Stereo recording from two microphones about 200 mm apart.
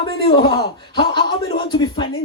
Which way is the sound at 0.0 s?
25° left (ahead or behind).